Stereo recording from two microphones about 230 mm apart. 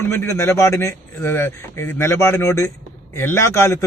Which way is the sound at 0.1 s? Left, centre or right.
Centre.